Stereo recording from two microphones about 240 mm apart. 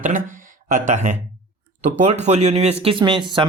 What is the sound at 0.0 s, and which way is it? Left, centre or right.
Speech, right.